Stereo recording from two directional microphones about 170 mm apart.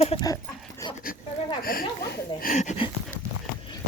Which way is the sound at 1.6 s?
60° left (ahead or behind).